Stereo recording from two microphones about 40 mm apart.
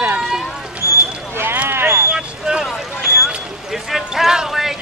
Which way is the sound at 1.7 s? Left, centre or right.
Right.